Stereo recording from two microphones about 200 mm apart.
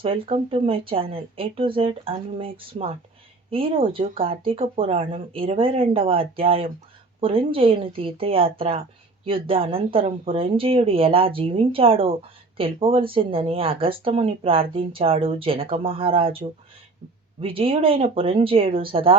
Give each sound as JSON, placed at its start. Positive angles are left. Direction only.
{"t": 0.0, "sound": "speech", "side_deg": -25}
{"t": 17.4, "sound": "speech", "side_deg": -25}